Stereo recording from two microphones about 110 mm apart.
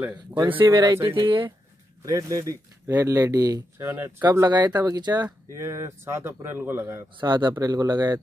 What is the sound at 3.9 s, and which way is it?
Speech, 20° right (ahead or behind).